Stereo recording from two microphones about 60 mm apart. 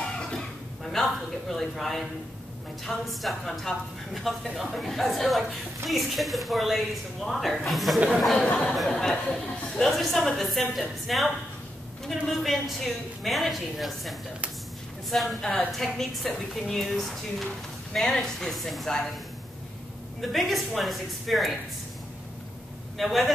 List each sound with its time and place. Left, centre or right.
0.0 s a woman's voice: centre
20.2 s a woman's voice: centre
22.9 s a woman's voice: centre